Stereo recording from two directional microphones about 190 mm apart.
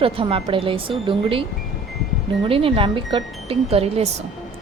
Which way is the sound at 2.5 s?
30° right (ahead or behind).